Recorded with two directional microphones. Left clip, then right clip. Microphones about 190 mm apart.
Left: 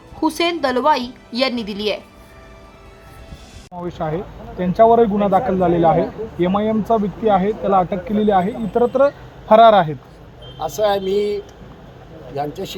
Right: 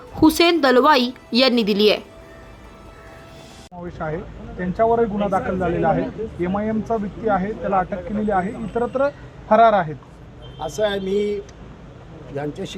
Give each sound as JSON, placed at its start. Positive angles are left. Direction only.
{"t": 0.2, "sound": "a woman's voice", "side_deg": -20}
{"t": 3.8, "sound": "speech", "side_deg": 35}
{"t": 10.6, "sound": "speech", "side_deg": 0}